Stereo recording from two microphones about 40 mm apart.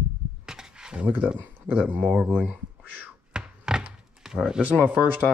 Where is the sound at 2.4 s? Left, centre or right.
Right.